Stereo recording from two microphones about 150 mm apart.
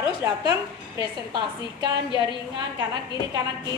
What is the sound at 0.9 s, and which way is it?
Speech, 30° right (ahead or behind).